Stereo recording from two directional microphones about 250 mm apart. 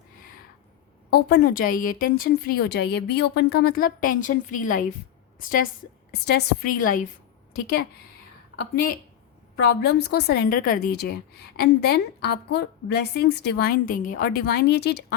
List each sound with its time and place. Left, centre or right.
1.1 s a woman's voice: left
9.6 s a woman's voice: left